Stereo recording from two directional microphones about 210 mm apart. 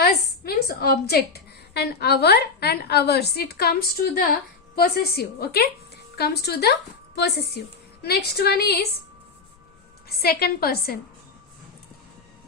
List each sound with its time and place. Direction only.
0.0 s a woman's voice: 45° left (ahead or behind)
8.0 s a woman's voice: 50° left (ahead or behind)
10.1 s a woman's voice: 45° left (ahead or behind)